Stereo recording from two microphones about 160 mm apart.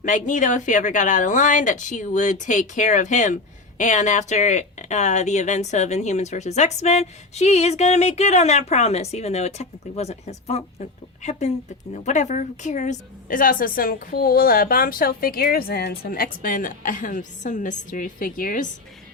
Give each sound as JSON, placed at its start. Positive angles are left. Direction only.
{"t": 0.0, "sound": "a woman's voice", "side_deg": 50}